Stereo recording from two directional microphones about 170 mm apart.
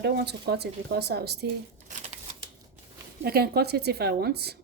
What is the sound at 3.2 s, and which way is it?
Speech, 65° right (ahead or behind).